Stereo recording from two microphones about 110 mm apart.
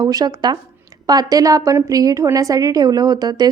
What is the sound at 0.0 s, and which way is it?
A woman's voice, 35° right (ahead or behind).